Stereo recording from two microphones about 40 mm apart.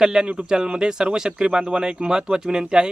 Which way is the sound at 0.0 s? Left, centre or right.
Centre.